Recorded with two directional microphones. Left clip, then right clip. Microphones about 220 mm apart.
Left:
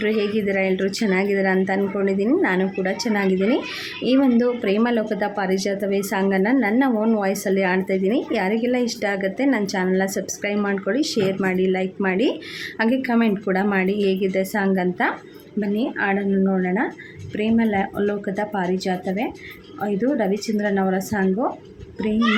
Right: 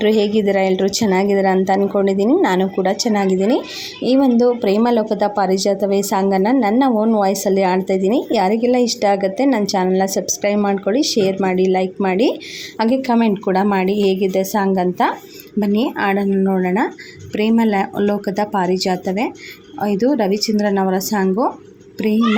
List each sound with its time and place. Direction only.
0.0 s speech: 20° right (ahead or behind)